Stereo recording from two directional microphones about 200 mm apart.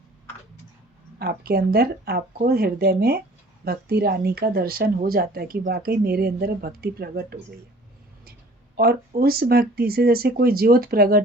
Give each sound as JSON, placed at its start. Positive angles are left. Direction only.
{"t": 1.2, "sound": "speech", "side_deg": -50}
{"t": 8.7, "sound": "speech", "side_deg": -50}